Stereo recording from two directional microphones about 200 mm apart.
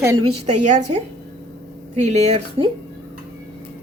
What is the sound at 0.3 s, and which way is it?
Speech, 35° right (ahead or behind).